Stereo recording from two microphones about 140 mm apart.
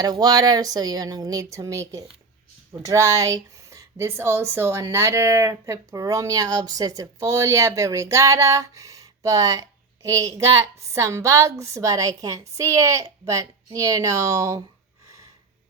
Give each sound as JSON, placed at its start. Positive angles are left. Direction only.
{"t": 0.0, "sound": "speech", "side_deg": -30}